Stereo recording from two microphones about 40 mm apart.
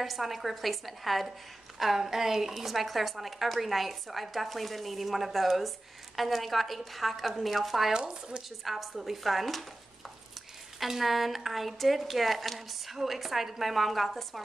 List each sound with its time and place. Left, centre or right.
0.0 s a woman's voice: centre
7.9 s speech: right
8.6 s a woman's voice: centre
10.9 s a woman's voice: centre